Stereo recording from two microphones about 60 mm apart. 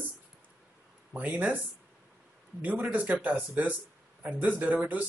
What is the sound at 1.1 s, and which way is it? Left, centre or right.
Speech, right.